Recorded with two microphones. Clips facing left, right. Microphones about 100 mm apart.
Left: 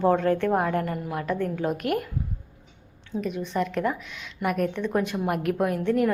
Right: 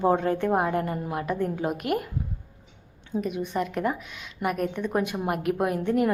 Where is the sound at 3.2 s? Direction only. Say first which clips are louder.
Left 1 dB; 5° right (ahead or behind).